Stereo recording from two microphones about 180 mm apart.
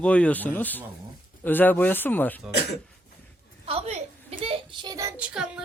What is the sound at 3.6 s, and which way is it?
Speech, 35° right (ahead or behind).